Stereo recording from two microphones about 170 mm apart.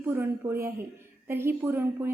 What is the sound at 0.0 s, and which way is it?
A woman's voice, 15° right (ahead or behind).